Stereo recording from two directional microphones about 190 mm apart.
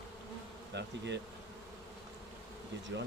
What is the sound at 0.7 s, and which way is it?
Speech, 65° right (ahead or behind).